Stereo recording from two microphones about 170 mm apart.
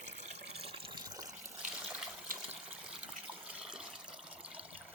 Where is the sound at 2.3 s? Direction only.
55° right (ahead or behind).